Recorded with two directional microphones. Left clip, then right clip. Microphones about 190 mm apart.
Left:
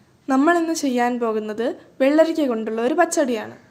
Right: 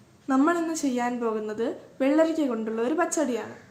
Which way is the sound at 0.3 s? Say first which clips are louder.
Left 6 dB; 50° left (ahead or behind).